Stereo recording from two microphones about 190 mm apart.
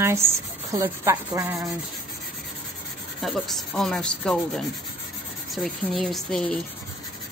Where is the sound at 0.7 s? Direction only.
15° right (ahead or behind).